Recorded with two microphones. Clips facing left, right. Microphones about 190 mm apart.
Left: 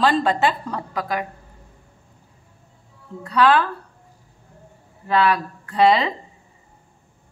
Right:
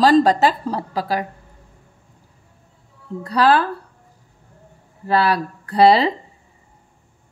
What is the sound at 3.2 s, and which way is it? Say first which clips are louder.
Speech: right 1 dB; 35° right (ahead or behind).